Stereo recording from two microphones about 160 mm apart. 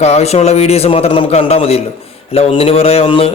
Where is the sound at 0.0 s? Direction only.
40° left (ahead or behind).